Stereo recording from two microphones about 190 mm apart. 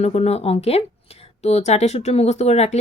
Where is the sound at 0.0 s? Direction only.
35° left (ahead or behind).